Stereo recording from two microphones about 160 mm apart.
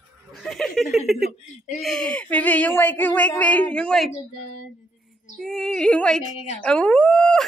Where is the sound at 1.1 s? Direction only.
Centre (ahead or behind).